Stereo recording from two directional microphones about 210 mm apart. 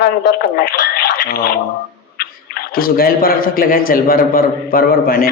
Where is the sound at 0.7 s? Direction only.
45° left (ahead or behind).